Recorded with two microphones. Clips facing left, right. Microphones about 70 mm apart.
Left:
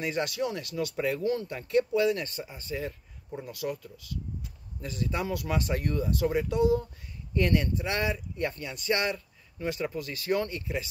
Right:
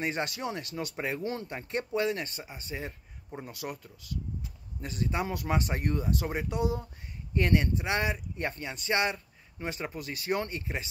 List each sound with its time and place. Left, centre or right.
0.0 s speech: right